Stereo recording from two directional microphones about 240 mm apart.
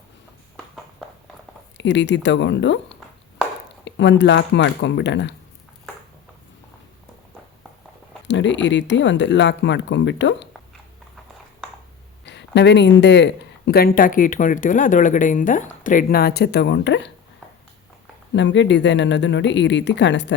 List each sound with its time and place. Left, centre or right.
1.8 s speech: left
3.8 s speech: left
8.3 s speech: left
12.2 s speech: left
18.3 s speech: left